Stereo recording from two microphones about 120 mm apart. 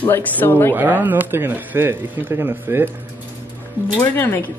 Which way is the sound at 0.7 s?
15° right (ahead or behind).